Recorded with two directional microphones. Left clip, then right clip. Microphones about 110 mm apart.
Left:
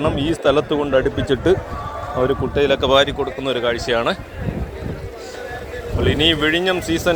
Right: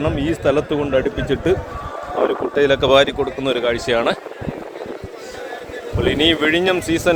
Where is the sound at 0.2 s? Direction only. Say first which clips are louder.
Left 1 dB; 80° right.